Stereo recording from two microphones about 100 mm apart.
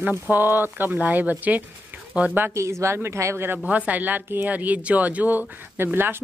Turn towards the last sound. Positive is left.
turn(degrees=-20)  # may be behind; listen again after turning